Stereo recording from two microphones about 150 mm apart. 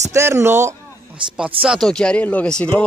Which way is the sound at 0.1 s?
20° right (ahead or behind).